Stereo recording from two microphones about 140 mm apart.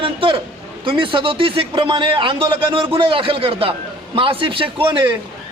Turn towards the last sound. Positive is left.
turn(degrees=-35)  # may be behind; listen again after turning